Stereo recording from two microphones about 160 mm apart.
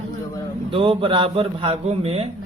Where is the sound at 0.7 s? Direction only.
35° right (ahead or behind).